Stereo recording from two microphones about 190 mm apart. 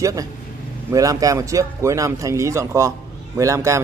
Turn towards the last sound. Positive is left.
turn(degrees=-15)  # may be behind; listen again after turning